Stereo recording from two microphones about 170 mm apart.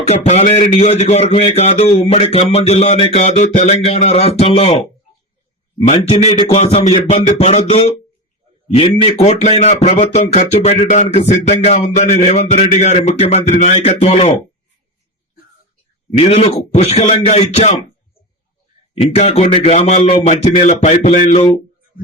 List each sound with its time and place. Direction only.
0.1 s speech: 40° left (ahead or behind)
16.1 s speech: 35° left (ahead or behind)
18.9 s speech: 40° left (ahead or behind)